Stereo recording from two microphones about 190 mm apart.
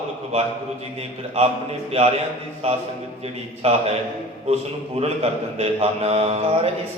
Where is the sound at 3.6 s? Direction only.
30° right (ahead or behind).